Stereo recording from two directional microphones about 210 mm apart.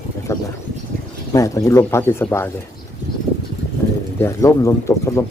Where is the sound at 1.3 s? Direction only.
15° left (ahead or behind).